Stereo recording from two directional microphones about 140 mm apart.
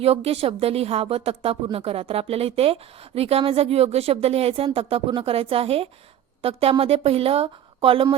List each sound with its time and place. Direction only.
0.0 s a woman's voice: 45° right (ahead or behind)